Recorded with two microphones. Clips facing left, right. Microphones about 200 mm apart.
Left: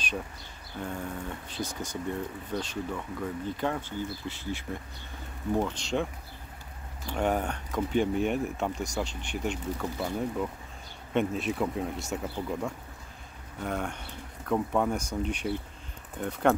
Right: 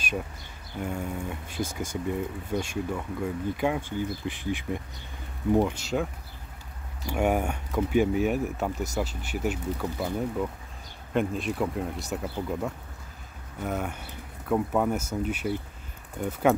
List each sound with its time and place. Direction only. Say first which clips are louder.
0.7 s speech: right 3 dB; 10° right (ahead or behind)
7.1 s speech: right 3 dB; 10° right (ahead or behind)